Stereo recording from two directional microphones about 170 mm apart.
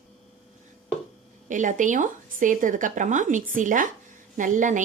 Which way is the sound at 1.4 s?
50° right (ahead or behind).